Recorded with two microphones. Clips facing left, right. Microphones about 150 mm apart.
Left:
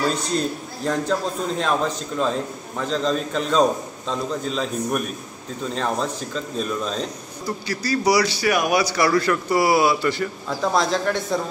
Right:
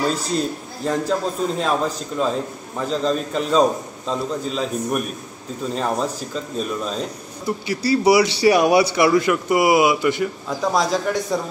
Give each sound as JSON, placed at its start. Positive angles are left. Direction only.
{"t": 0.8, "sound": "a man's voice", "side_deg": -5}
{"t": 7.4, "sound": "a man's voice", "side_deg": -25}